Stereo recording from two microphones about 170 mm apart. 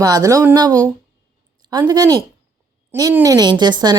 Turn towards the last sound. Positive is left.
turn(degrees=-25)  # may be behind; listen again after turning